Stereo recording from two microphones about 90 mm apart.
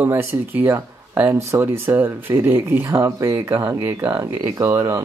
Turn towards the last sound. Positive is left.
turn(degrees=-30)  # may be behind; listen again after turning